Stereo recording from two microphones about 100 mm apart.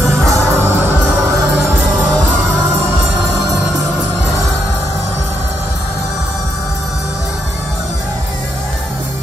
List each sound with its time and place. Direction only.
0.3 s music: 25° right (ahead or behind)